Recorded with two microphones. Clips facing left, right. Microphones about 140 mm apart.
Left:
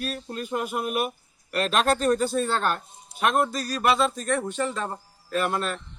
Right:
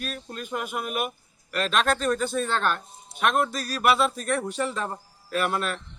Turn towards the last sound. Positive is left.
turn(degrees=0)  # may be behind; listen again after turning